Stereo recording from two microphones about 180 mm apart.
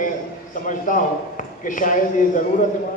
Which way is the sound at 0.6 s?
45° left (ahead or behind).